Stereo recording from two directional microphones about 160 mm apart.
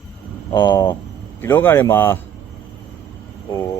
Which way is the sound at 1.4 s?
15° left (ahead or behind).